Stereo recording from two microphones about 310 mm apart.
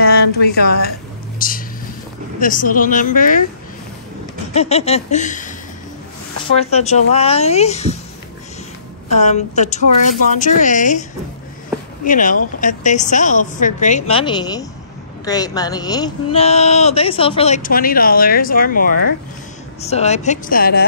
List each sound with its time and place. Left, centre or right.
0.0 s a sound: left
1.4 s speech: left
4.6 s speech: centre
6.7 s speech: left
9.1 s speech: left